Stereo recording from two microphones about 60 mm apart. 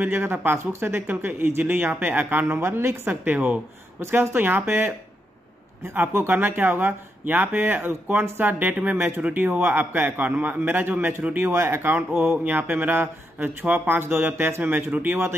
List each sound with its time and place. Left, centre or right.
0.0 s speech: right
3.3 s speech: right
4.1 s speech: right
8.9 s speech: right
9.2 s speech: right
12.1 s speech: centre
12.4 s speech: right